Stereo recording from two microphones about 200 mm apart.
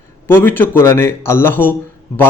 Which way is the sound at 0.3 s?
10° left (ahead or behind).